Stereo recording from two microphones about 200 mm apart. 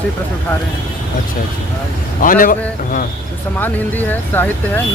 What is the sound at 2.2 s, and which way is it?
Speech, 45° left (ahead or behind).